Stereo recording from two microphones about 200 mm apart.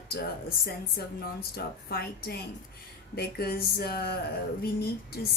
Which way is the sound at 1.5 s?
50° left (ahead or behind).